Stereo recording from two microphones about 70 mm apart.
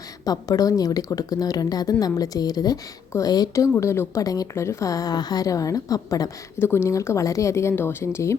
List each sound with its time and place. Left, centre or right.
0.3 s speech: left
3.8 s a woman's voice: left
4.2 s speech: left
4.5 s speech: left
6.6 s a woman's voice: left